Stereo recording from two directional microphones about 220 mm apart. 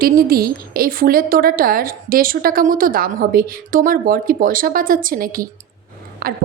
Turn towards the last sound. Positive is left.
turn(degrees=-40)  # may be behind; listen again after turning